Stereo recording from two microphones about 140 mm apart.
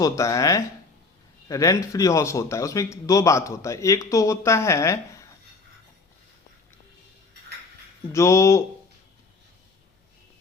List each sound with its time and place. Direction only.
0.0 s speech: 25° left (ahead or behind)
8.1 s speech: 20° left (ahead or behind)